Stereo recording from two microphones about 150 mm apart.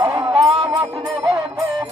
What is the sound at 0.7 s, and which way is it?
Music, 20° right (ahead or behind).